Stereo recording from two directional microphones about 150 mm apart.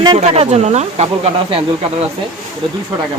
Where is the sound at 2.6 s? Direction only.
35° right (ahead or behind).